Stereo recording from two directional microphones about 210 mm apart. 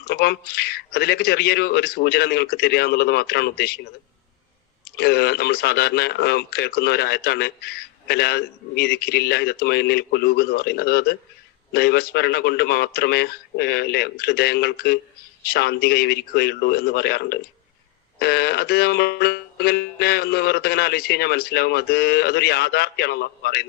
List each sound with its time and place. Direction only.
0.1 s speech: 50° left (ahead or behind)
4.9 s speech: 50° left (ahead or behind)